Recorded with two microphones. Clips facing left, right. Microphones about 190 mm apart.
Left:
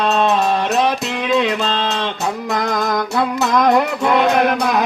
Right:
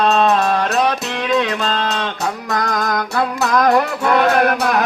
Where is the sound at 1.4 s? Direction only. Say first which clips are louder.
Left 1 dB; 25° left (ahead or behind).